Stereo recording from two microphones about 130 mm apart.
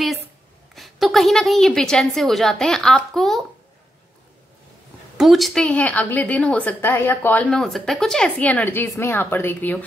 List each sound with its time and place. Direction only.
0.7 s a woman's voice: centre (ahead or behind)
5.1 s a woman's voice: centre (ahead or behind); by 9.8 s 15° left (ahead or behind)